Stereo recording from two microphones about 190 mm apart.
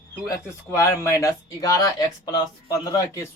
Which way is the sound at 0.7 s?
15° left (ahead or behind).